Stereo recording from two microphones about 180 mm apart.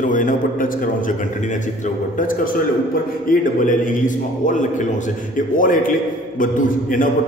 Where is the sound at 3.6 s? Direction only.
45° left (ahead or behind).